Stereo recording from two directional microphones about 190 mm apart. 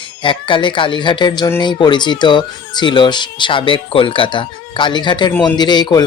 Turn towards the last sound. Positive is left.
turn(degrees=20)  # may be behind; listen again after turning